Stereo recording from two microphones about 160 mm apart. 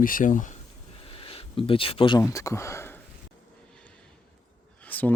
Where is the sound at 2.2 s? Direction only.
20° left (ahead or behind).